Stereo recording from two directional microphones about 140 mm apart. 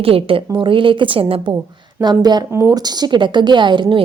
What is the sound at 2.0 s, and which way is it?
Speech, 30° right (ahead or behind).